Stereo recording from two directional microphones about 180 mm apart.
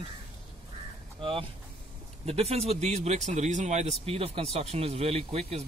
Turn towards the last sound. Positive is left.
turn(degrees=-35)  # may be behind; listen again after turning